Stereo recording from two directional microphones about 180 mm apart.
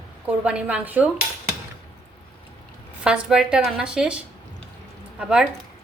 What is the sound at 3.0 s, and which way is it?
A woman's voice, 5° right (ahead or behind).